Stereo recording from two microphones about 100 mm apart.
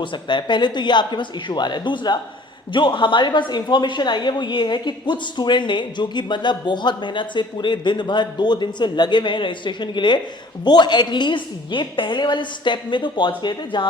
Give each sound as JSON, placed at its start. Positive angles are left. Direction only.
{"t": 0.0, "sound": "a woman's voice", "side_deg": 50}